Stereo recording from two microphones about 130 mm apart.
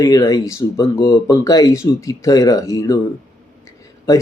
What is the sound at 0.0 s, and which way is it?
Speech, 30° left (ahead or behind).